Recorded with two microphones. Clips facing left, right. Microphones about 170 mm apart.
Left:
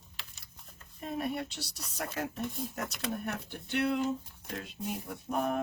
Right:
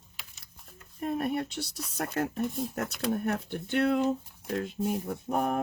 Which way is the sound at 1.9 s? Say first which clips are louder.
Right 5 dB; 55° right (ahead or behind).